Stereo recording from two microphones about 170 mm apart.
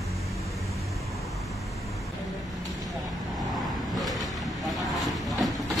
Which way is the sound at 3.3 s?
Centre (ahead or behind).